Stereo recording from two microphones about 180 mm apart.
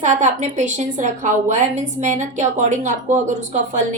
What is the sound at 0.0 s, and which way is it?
A woman's voice, 45° right (ahead or behind).